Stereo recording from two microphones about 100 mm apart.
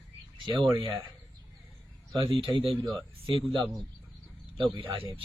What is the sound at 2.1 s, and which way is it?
Speech, 60° right (ahead or behind).